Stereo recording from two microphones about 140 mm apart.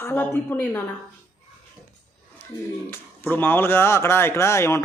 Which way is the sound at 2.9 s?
15° left (ahead or behind).